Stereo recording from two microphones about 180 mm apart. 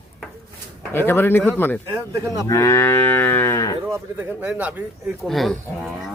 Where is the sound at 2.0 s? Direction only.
15° right (ahead or behind).